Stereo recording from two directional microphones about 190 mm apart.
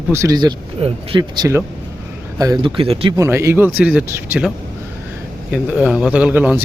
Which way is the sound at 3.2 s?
15° right (ahead or behind).